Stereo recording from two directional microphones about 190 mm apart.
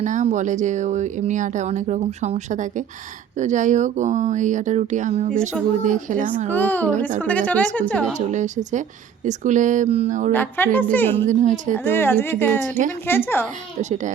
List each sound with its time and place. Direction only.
0.0 s speech: 40° right (ahead or behind)
6.5 s a woman's voice: 10° left (ahead or behind)
8.3 s speech: 40° right (ahead or behind)
10.3 s a woman's voice: 10° left (ahead or behind)
11.3 s speech: 40° right (ahead or behind)
11.8 s a woman's voice: 10° left (ahead or behind)